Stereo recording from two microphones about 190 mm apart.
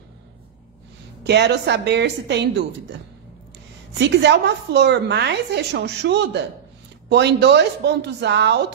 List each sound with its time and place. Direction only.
1.2 s a woman's voice: 65° right (ahead or behind)
4.0 s a woman's voice: 65° right (ahead or behind)